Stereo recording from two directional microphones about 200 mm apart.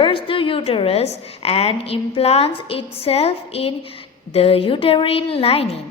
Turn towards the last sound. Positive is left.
turn(degrees=30)  # may be behind; listen again after turning